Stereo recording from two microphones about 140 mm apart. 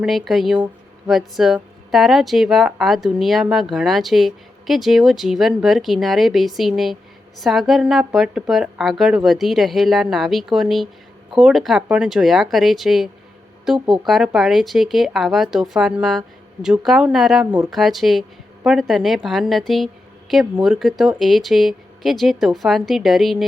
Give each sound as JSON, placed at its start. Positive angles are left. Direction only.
{"t": 0.0, "sound": "speech", "side_deg": 0}